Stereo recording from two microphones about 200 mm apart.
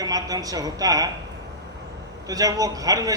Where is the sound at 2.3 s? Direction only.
20° right (ahead or behind).